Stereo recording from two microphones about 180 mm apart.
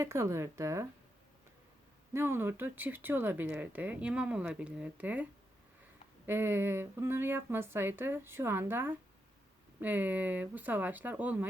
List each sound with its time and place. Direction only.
0.0 s speech: 15° right (ahead or behind)
2.1 s speech: 15° right (ahead or behind)